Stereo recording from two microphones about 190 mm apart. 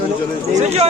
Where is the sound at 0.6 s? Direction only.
35° right (ahead or behind).